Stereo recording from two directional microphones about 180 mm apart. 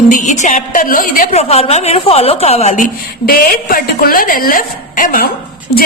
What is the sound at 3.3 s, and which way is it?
A woman's voice, 55° left (ahead or behind).